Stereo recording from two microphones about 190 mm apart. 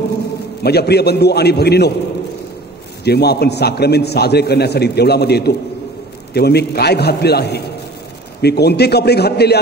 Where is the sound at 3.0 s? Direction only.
60° left (ahead or behind).